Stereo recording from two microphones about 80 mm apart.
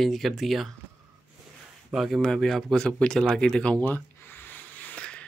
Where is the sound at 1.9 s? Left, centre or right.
Centre.